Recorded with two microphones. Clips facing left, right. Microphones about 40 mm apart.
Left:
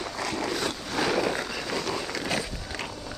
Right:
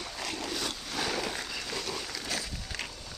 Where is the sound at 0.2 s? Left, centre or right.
Left.